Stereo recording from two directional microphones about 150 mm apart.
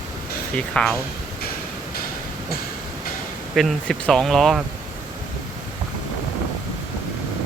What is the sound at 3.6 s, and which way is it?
Speech, centre (ahead or behind).